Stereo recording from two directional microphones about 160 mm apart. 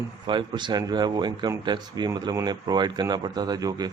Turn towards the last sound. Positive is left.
turn(degrees=-25)  # may be behind; listen again after turning